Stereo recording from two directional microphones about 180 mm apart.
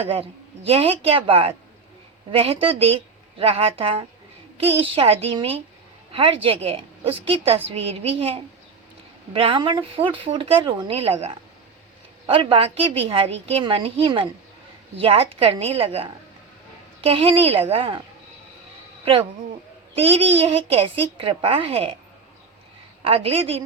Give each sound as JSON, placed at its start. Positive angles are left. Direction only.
{"t": 0.0, "sound": "a woman's voice", "side_deg": -30}
{"t": 20.0, "sound": "a woman's voice", "side_deg": -30}
{"t": 23.0, "sound": "a woman's voice", "side_deg": -30}